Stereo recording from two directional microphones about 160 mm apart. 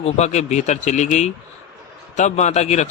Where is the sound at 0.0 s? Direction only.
45° left (ahead or behind).